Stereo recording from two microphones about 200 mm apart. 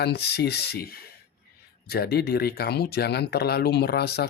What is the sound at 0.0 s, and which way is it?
Speech, 55° left (ahead or behind).